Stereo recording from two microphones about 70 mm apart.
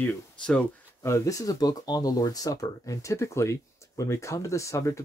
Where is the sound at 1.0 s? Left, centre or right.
Left.